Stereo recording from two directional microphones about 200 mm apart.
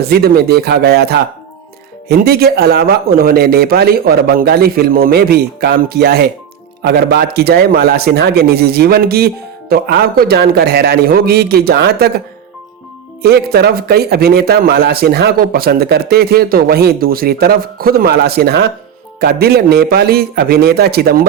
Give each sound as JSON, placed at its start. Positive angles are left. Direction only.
{"t": 0.0, "sound": "speech", "side_deg": -50}
{"t": 13.2, "sound": "speech", "side_deg": -50}